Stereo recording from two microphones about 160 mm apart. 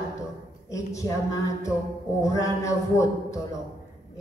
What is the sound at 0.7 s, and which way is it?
A woman's voice, 20° left (ahead or behind).